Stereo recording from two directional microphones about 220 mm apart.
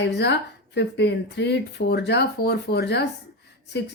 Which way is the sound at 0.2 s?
50° left (ahead or behind).